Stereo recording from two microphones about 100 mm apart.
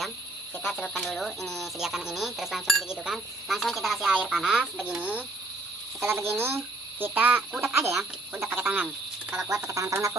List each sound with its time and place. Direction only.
0.6 s speech: 5° left (ahead or behind); by 8.9 s 20° right (ahead or behind)
9.5 s speech: 30° right (ahead or behind)